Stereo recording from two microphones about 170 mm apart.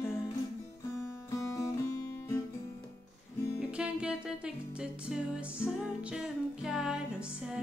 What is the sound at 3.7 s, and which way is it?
Music, 5° right (ahead or behind).